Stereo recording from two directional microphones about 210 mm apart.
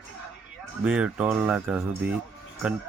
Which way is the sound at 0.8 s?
5° right (ahead or behind).